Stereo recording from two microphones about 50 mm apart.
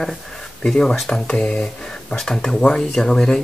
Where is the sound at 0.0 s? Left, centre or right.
Centre.